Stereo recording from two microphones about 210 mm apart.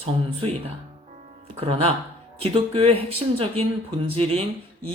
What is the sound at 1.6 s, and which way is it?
Speech, 30° right (ahead or behind).